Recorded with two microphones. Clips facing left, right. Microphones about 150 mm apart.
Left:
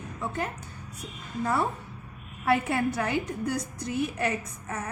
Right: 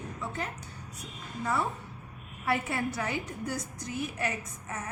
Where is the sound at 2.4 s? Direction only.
60° left (ahead or behind).